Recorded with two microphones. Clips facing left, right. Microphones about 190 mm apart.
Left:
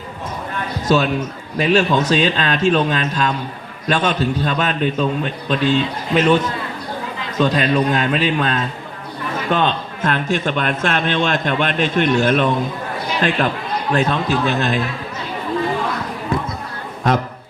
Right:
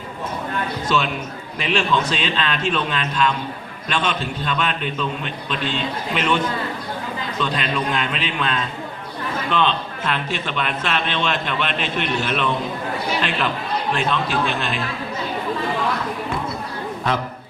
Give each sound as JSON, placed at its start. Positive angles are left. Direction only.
{"t": 0.9, "sound": "a man's voice", "side_deg": 40}
{"t": 13.9, "sound": "a man's voice", "side_deg": 40}